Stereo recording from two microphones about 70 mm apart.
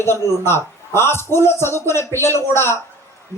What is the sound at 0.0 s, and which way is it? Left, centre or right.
A man's voice, left.